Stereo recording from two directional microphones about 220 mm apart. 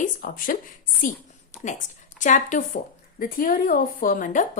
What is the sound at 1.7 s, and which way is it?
Speech, 35° left (ahead or behind).